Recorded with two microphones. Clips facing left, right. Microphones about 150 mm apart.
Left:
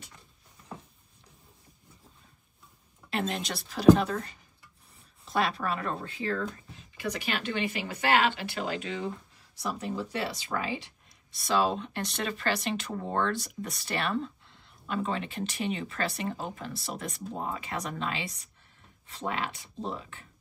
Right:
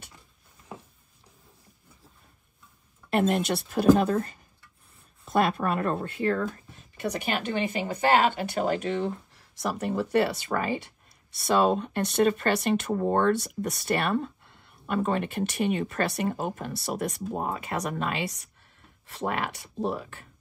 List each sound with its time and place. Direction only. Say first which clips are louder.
3.1 s speech: right 8 dB; 55° right (ahead or behind)
3.9 s speech: right 3 dB; 45° right (ahead or behind); by 20.2 s 65° right (ahead or behind)